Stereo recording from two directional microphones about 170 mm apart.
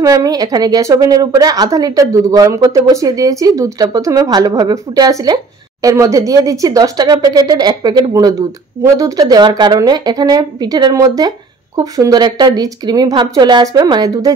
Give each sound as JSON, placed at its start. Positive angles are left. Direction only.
{"t": 0.0, "sound": "a woman's voice", "side_deg": -20}